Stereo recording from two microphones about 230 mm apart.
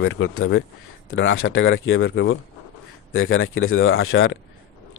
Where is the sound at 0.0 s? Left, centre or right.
Left.